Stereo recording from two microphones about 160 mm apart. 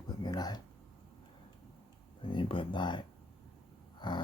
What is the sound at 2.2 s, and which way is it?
Speech, 30° left (ahead or behind).